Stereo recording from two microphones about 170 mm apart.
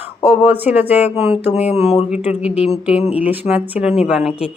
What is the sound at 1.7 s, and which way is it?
Speech, 40° left (ahead or behind).